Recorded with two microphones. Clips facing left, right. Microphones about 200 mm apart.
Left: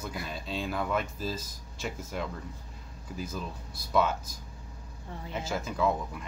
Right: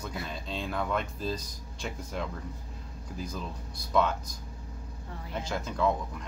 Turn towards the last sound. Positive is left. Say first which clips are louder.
# even
turn(degrees=5)  # may be behind; listen again after turning